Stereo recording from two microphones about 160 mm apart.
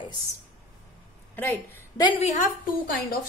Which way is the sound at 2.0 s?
30° left (ahead or behind).